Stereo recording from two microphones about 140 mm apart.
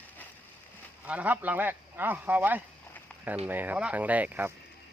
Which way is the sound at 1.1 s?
10° right (ahead or behind).